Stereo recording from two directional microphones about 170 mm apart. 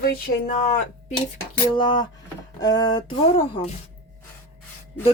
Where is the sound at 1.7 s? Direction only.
30° left (ahead or behind).